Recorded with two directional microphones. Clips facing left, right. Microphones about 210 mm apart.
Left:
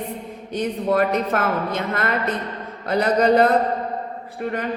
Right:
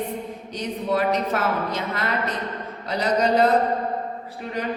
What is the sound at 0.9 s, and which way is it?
A woman's voice, 55° left (ahead or behind).